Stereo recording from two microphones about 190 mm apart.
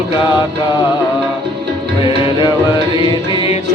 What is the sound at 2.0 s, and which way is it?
Music, 25° left (ahead or behind).